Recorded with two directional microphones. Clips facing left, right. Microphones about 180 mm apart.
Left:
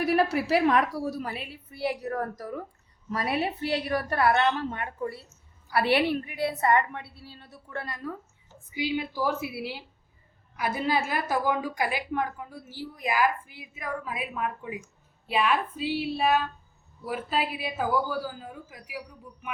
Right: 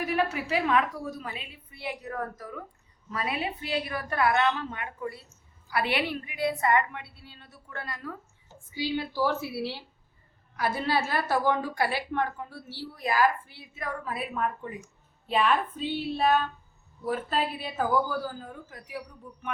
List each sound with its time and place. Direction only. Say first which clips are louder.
0.6 s a woman's voice: left 3 dB; 35° left (ahead or behind)
8.7 s a woman's voice: left 1 dB; 15° left (ahead or behind)
10.6 s a woman's voice: even; 15° left (ahead or behind)